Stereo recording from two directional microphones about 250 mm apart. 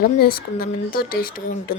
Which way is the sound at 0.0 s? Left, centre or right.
Left.